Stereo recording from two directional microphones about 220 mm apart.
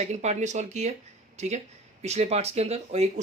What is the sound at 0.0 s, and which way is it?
Speech, 30° right (ahead or behind).